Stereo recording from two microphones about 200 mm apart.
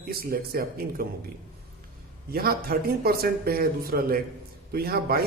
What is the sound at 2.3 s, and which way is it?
Speech, 50° right (ahead or behind).